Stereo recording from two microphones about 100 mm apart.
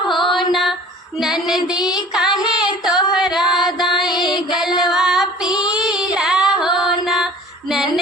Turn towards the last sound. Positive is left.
turn(degrees=0)  # may be behind; listen again after turning